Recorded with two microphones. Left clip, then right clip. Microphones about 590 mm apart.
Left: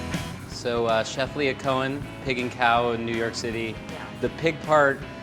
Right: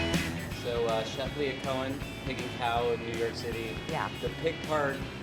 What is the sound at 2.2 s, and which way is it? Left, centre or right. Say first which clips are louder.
Speech: left 10 dB; left.